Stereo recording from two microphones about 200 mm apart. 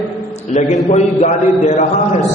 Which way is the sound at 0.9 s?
35° left (ahead or behind).